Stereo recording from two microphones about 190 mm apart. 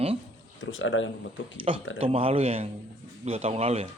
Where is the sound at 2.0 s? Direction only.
30° right (ahead or behind).